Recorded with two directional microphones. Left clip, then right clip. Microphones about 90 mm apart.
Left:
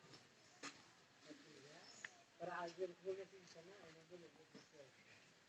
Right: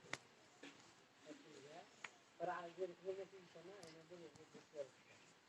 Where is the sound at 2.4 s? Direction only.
30° left (ahead or behind).